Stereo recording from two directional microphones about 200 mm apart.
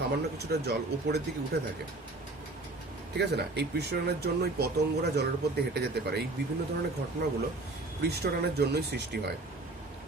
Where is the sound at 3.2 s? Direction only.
55° right (ahead or behind).